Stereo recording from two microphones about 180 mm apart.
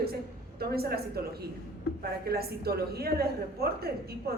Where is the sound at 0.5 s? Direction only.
60° right (ahead or behind).